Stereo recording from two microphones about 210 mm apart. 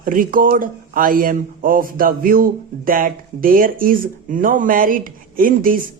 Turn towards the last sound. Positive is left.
turn(degrees=-40)  # may be behind; listen again after turning